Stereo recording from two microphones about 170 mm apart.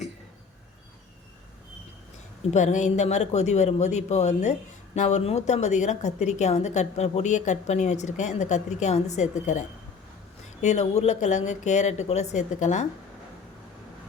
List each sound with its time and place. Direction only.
2.5 s a woman's voice: 45° left (ahead or behind)